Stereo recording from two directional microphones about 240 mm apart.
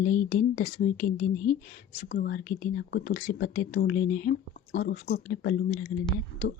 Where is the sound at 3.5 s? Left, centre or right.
Left.